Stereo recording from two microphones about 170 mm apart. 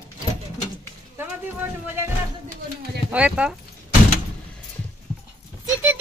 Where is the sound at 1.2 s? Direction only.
10° right (ahead or behind).